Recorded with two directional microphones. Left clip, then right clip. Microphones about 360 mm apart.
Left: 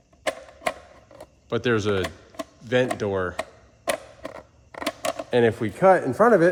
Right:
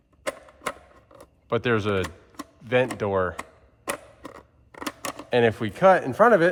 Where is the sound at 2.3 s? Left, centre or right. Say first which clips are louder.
Left 5 dB; centre.